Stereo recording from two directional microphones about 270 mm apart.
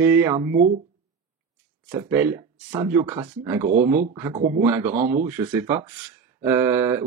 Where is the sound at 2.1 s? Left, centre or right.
Centre.